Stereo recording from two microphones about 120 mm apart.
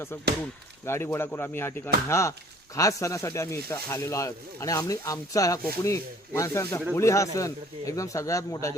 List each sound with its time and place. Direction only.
0.9 s speech: 20° left (ahead or behind)